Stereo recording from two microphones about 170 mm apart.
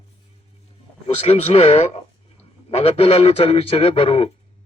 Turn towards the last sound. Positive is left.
turn(degrees=35)  # may be behind; listen again after turning